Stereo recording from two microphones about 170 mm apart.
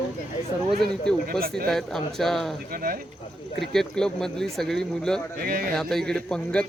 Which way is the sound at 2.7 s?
60° right (ahead or behind).